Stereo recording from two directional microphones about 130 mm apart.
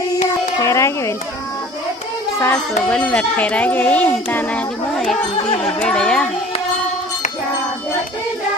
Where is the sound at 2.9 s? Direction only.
10° left (ahead or behind).